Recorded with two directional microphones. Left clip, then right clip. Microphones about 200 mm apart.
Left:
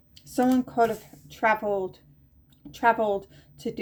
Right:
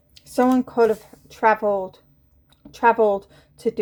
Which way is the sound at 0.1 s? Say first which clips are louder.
Right 5 dB; 50° right (ahead or behind).